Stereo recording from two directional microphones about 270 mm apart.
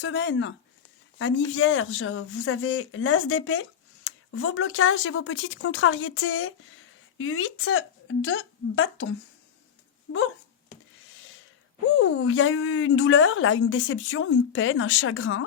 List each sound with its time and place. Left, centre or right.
0.0 s speech: left
1.5 s speech: left
11.9 s speech: left